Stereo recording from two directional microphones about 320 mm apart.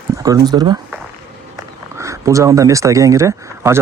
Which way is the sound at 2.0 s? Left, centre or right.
Centre.